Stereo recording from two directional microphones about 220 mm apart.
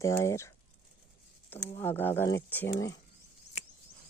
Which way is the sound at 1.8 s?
10° left (ahead or behind).